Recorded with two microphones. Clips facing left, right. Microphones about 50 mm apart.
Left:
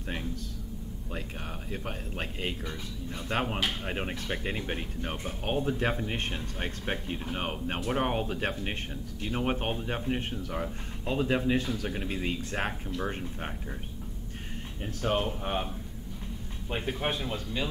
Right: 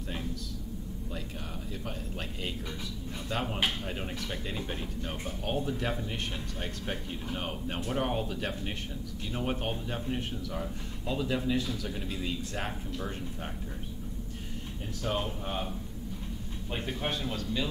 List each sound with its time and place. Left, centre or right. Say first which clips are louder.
1.7 s a man's voice: left 3 dB; left
15.0 s a man's voice: left 4 dB; left
16.7 s a man's voice: left 3 dB; centre